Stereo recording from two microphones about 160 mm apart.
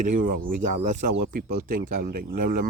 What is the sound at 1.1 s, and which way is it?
A man's voice, 70° right (ahead or behind).